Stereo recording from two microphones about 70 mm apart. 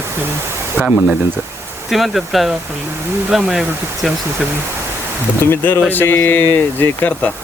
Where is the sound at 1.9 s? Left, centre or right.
Centre.